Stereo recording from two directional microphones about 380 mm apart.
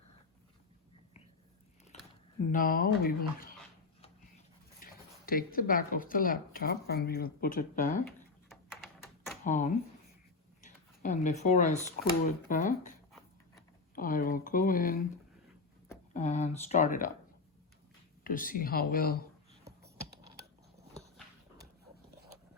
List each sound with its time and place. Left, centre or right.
2.5 s speech: left
4.8 s speech: left
8.4 s typing: centre
9.4 s speech: centre
16.1 s speech: centre
18.2 s speech: left
19.6 s computer keyboard: right